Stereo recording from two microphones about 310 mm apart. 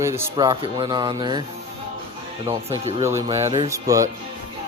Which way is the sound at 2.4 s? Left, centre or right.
Centre.